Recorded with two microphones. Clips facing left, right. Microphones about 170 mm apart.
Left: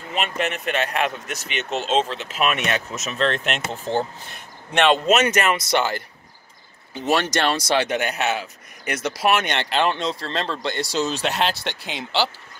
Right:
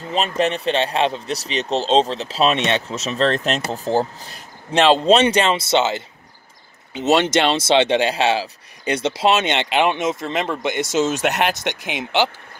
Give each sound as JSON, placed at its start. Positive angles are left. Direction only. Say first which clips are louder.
{"t": 0.1, "sound": "speech", "louder": "right 5 dB", "side_deg": -35}